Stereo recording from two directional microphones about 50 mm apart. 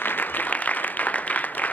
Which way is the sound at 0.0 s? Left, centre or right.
Left.